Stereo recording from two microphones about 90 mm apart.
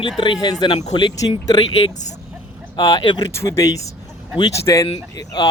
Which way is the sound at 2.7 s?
50° left (ahead or behind).